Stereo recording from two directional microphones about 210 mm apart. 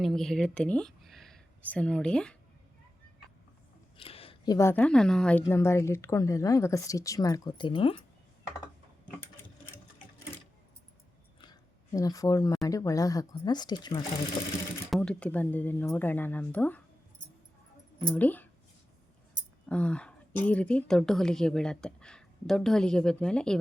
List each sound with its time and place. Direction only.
0.0 s speech: centre (ahead or behind)
3.9 s a sound: 25° left (ahead or behind)
4.5 s a woman's voice: 10° left (ahead or behind)
11.3 s a sound: 20° left (ahead or behind)
12.6 s a woman's voice: 15° left (ahead or behind)
14.8 s a woman's voice: 5° left (ahead or behind)
18.1 s a woman's voice: 10° left (ahead or behind)
19.6 s a woman's voice: 5° left (ahead or behind)